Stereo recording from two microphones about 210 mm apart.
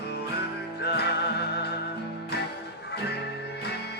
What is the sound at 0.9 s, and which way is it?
Music, 50° left (ahead or behind).